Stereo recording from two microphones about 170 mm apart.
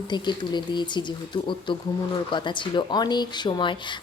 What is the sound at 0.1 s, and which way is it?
Speech, 25° left (ahead or behind).